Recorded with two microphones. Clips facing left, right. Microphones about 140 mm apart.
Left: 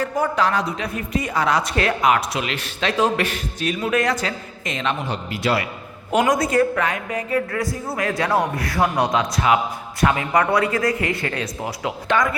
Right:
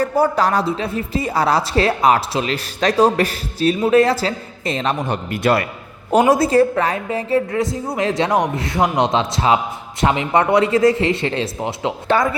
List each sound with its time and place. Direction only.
0.0 s a woman's voice: 35° right (ahead or behind)
5.0 s speech: 50° right (ahead or behind)
6.1 s a woman's voice: 30° right (ahead or behind)